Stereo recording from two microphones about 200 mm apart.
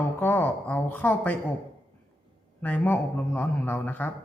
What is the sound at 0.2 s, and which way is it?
A woman's voice, 10° left (ahead or behind).